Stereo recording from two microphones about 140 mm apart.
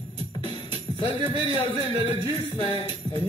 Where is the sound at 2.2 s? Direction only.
35° left (ahead or behind).